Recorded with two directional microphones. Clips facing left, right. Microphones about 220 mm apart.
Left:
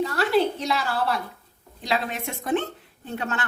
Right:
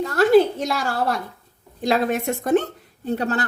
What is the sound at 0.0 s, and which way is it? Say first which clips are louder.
A woman's voice: right 7 dB; 45° right (ahead or behind).